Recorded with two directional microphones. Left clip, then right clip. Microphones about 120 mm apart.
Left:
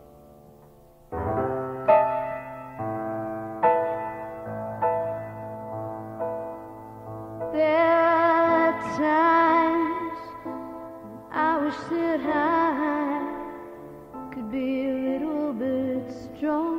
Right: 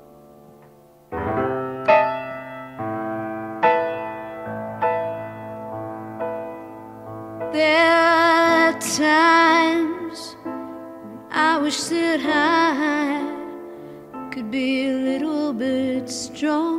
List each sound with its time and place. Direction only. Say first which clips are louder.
1.1 s music: right 4 dB; 20° right (ahead or behind)
11.3 s music: right 5 dB; 15° right (ahead or behind)
14.3 s music: right 5 dB; 15° right (ahead or behind)